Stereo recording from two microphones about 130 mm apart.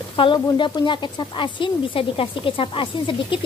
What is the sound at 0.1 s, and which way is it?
Speech, 40° left (ahead or behind).